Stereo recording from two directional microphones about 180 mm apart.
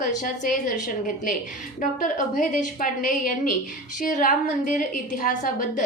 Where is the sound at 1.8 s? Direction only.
50° left (ahead or behind).